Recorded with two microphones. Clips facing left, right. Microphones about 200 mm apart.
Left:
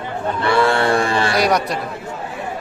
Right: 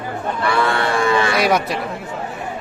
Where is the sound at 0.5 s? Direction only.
30° left (ahead or behind).